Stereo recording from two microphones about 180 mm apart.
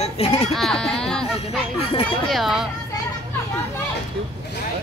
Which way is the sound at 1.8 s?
35° left (ahead or behind).